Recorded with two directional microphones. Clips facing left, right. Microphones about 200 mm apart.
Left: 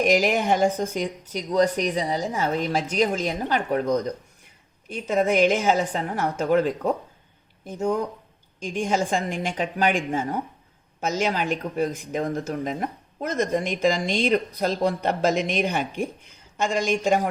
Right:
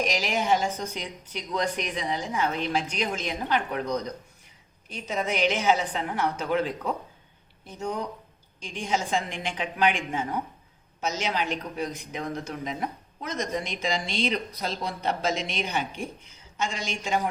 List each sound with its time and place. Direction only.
0.0 s a woman's voice: 50° left (ahead or behind)